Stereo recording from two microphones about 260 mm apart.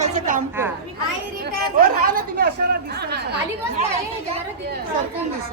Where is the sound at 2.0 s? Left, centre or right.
Right.